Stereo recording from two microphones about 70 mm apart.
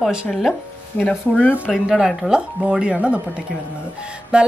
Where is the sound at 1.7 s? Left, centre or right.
Centre.